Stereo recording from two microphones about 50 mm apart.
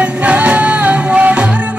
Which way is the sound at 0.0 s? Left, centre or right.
Right.